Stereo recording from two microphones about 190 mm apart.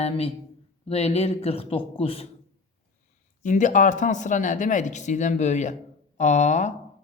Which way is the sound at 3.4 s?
40° left (ahead or behind).